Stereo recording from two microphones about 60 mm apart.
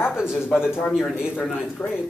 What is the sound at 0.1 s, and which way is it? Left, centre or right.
Speech, centre.